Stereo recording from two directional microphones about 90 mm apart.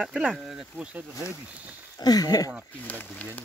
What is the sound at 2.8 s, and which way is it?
Speech, 15° left (ahead or behind).